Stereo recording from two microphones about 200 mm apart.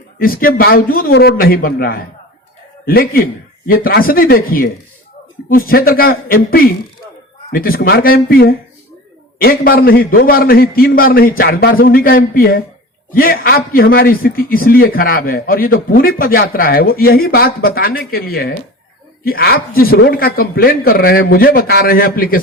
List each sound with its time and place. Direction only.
0.2 s a man's voice: 45° left (ahead or behind)